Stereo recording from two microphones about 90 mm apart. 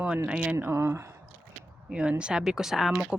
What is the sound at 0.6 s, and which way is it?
Speech, 25° right (ahead or behind).